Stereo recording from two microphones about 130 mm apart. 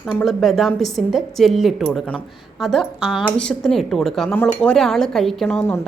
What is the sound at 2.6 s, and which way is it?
Speech, centre (ahead or behind).